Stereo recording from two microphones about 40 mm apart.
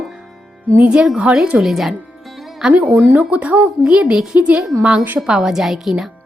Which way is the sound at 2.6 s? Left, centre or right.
Centre.